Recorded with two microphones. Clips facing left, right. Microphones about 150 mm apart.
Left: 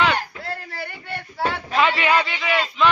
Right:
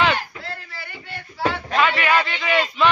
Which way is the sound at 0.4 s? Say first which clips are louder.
Left 4 dB; 50° left (ahead or behind).